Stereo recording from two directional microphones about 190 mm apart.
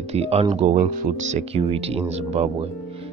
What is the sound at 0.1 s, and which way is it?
Speech, 35° right (ahead or behind).